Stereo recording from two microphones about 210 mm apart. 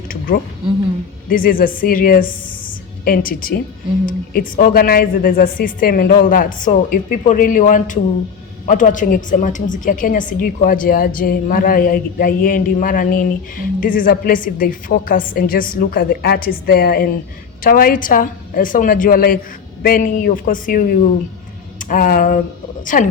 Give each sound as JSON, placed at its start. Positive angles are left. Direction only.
{"t": 1.3, "sound": "a woman's voice", "side_deg": 40}